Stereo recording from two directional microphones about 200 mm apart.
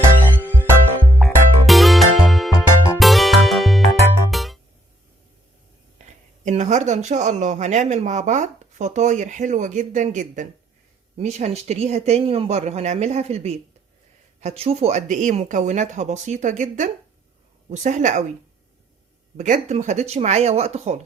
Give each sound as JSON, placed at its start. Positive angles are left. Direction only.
{"t": 1.2, "sound": "music", "side_deg": 0}
{"t": 6.0, "sound": "a sound", "side_deg": -35}
{"t": 6.4, "sound": "speech", "side_deg": -35}
{"t": 19.4, "sound": "speech", "side_deg": -35}